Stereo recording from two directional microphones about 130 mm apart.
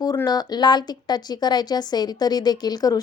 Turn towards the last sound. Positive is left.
turn(degrees=30)  # may be behind; listen again after turning